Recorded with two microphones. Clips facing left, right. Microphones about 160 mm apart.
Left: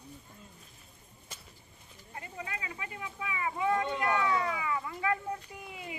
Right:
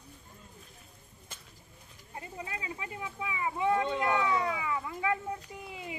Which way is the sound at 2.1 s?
25° right (ahead or behind).